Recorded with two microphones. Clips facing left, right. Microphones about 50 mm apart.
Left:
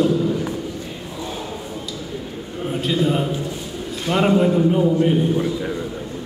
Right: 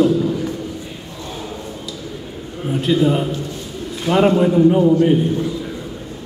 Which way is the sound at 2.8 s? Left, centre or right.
Centre.